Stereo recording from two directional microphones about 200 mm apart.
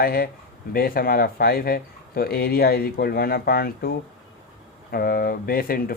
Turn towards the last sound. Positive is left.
turn(degrees=45)  # may be behind; listen again after turning